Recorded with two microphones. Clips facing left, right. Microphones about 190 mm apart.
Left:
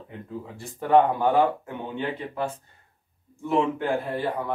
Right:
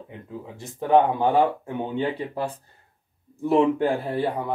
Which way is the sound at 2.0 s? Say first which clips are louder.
Right 1 dB; 35° right (ahead or behind).